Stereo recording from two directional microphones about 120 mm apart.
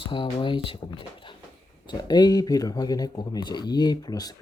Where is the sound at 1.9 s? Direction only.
35° left (ahead or behind).